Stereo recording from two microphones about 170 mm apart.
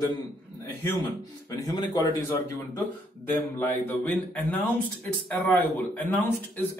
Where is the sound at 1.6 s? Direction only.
25° left (ahead or behind).